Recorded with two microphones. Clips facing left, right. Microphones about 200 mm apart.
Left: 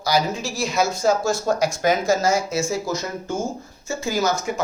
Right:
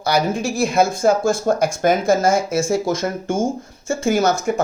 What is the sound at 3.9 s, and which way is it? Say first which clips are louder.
Speech: right 5 dB; 50° right (ahead or behind).